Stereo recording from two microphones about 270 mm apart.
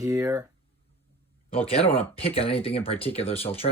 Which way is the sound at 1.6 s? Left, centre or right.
Left.